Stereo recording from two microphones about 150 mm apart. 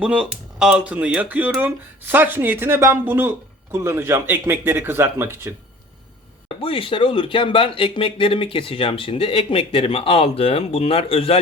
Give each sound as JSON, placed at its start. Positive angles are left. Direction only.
{"t": 0.0, "sound": "speech", "side_deg": -5}
{"t": 6.6, "sound": "speech", "side_deg": 35}